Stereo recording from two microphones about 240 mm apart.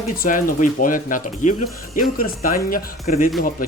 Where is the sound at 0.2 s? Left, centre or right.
Left.